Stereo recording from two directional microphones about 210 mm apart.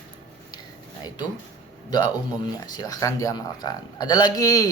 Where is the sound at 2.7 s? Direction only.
20° left (ahead or behind).